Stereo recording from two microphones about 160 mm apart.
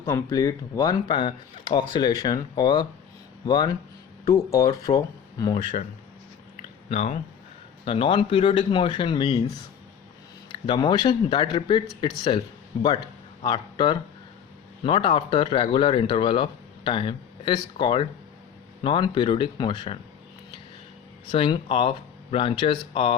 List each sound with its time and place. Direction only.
0.0 s speech: 15° left (ahead or behind)
6.6 s a sound: 45° left (ahead or behind)
7.9 s speech: 35° left (ahead or behind)
10.5 s speech: 30° left (ahead or behind)
21.2 s speech: 30° left (ahead or behind)